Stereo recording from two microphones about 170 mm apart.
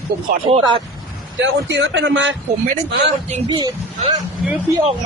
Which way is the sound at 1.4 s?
90° right.